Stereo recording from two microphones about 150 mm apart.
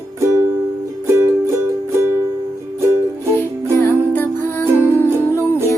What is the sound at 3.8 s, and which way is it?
Music, 15° left (ahead or behind).